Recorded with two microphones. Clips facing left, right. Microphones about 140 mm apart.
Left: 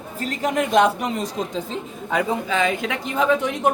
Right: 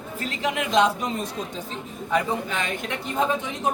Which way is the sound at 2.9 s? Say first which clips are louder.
Left 4 dB; 85° left.